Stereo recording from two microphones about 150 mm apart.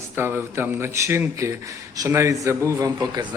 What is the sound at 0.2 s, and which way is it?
A man's voice, 15° right (ahead or behind).